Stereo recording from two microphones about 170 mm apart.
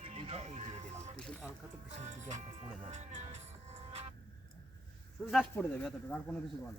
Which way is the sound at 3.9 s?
40° right (ahead or behind).